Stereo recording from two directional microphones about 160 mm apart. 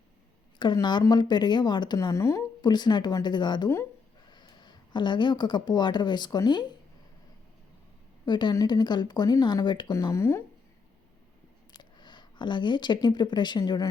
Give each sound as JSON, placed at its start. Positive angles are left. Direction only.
{"t": 0.6, "sound": "a woman's voice", "side_deg": 30}
{"t": 8.2, "sound": "a woman's voice", "side_deg": 30}
{"t": 11.8, "sound": "speech", "side_deg": 30}